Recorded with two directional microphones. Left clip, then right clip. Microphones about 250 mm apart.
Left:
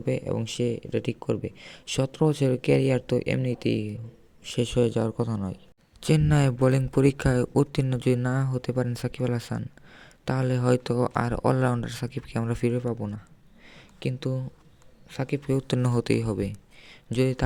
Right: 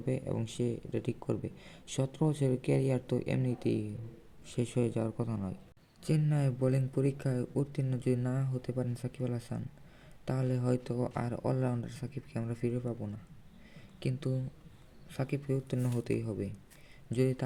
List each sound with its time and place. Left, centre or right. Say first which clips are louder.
0.0 s speech: left 8 dB; left
13.7 s a sound: left 7 dB; left
15.1 s speech: left 8 dB; left